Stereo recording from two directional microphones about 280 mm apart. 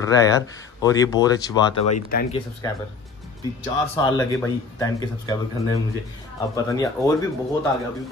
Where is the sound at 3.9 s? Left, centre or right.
Centre.